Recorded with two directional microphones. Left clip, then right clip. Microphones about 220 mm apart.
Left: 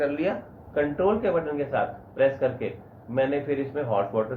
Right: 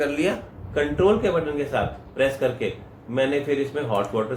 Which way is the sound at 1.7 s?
55° right (ahead or behind).